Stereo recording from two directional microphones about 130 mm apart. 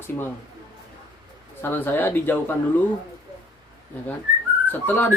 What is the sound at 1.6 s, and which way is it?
Speech, 15° left (ahead or behind).